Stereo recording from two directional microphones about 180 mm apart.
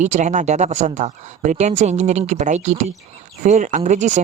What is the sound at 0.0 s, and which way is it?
Speech, 40° right (ahead or behind).